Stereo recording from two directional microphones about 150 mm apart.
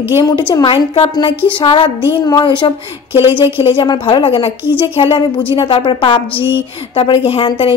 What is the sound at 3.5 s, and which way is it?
A woman's voice, 35° left (ahead or behind).